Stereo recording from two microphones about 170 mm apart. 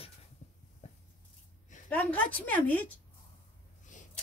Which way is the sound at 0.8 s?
40° left (ahead or behind).